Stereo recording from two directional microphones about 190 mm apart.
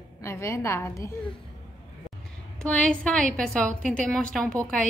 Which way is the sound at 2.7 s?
5° left (ahead or behind).